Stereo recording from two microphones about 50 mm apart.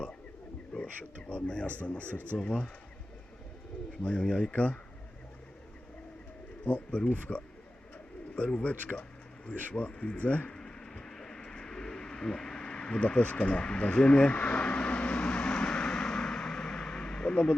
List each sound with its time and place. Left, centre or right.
0.7 s a sound: left
1.3 s speech: left
4.0 s speech: left
6.7 s speech: left
10.6 s bird: centre
12.6 s a sound: centre